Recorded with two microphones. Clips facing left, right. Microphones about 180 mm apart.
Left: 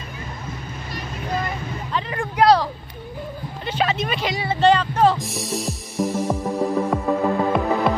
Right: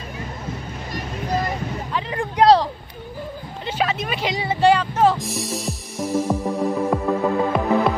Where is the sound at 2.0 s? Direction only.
20° right (ahead or behind).